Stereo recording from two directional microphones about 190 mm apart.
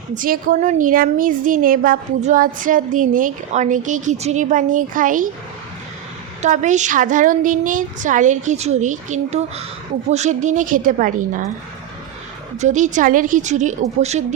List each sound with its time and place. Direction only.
0.1 s a woman's voice: 45° right (ahead or behind)
6.4 s a woman's voice: 40° right (ahead or behind)
12.5 s a woman's voice: 40° right (ahead or behind)